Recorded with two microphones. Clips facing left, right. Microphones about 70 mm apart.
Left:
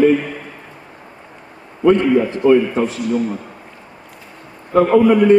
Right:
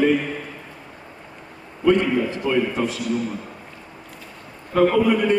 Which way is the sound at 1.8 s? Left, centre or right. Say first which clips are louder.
Left 5 dB; left.